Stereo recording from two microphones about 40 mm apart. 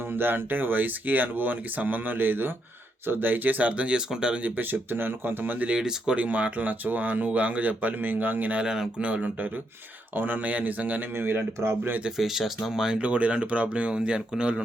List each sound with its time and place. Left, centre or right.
0.1 s speech: right
3.7 s speech: right
4.4 s speech: right
5.5 s speech: right
8.6 s speech: centre
9.0 s speech: right
11.1 s speech: right
12.1 s speech: centre
13.0 s speech: right